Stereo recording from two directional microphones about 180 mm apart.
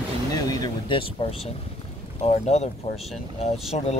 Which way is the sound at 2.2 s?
40° left (ahead or behind).